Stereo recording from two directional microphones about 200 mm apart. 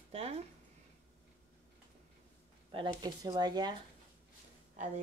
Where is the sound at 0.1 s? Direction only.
30° right (ahead or behind).